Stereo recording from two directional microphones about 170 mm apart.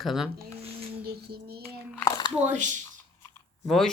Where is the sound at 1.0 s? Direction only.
65° right (ahead or behind).